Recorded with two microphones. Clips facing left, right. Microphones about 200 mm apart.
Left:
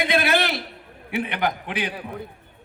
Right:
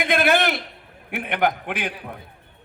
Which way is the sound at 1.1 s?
55° right (ahead or behind).